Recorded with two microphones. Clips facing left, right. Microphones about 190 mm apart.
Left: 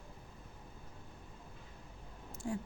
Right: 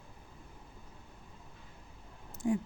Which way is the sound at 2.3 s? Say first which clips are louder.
Right 8 dB; 20° right (ahead or behind).